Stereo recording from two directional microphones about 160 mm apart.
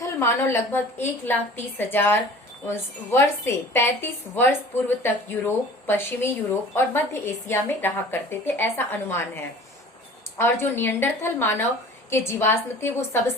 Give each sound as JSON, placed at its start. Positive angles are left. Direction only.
{"t": 0.0, "sound": "speech", "side_deg": 15}